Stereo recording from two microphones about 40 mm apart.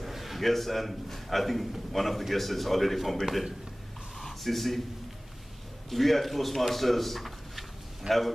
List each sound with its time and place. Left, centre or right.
0.0 s a man's voice: centre
3.3 s a man's voice: centre
4.2 s a sound: centre
5.9 s a man's voice: centre
8.1 s a man's voice: right